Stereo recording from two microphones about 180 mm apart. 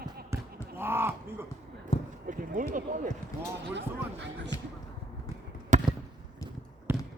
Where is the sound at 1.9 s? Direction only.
30° left (ahead or behind).